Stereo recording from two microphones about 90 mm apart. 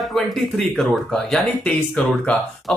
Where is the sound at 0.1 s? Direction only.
5° left (ahead or behind).